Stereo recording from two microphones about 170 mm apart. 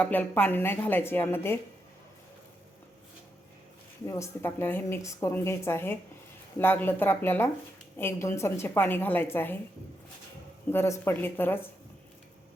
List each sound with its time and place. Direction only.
0.0 s speech: 10° left (ahead or behind)
4.0 s speech: 20° left (ahead or behind)
10.7 s speech: 15° left (ahead or behind)